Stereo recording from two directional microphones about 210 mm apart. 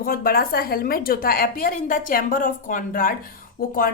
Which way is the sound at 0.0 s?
45° left (ahead or behind).